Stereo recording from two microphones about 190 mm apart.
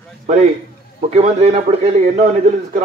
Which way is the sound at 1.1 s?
35° right (ahead or behind).